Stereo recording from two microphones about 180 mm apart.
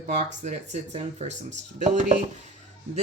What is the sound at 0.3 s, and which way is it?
Speech, 40° right (ahead or behind).